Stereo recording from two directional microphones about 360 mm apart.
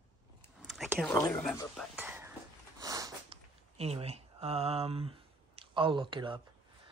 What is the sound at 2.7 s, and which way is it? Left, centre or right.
Sniff, centre.